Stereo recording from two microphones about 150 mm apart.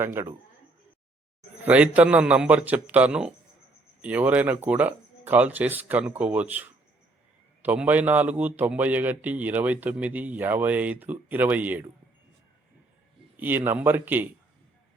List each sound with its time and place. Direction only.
0.0 s a man's voice: 15° right (ahead or behind)
1.6 s a man's voice: 10° right (ahead or behind)
13.3 s a man's voice: 10° right (ahead or behind)